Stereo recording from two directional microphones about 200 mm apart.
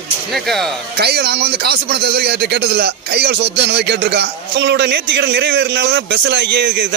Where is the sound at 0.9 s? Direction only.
55° right (ahead or behind).